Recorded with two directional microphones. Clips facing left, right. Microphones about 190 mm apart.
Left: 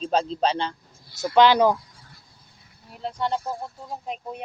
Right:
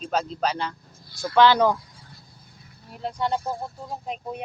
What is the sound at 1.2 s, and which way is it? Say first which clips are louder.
Speech: left 1 dB; 20° left (ahead or behind).